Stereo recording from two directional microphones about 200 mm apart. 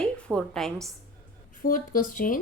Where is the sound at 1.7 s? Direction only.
45° left (ahead or behind).